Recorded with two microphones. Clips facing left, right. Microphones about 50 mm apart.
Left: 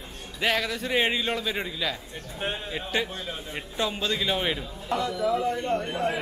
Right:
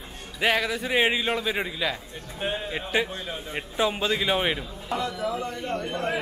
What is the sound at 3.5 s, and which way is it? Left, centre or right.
Speech, centre.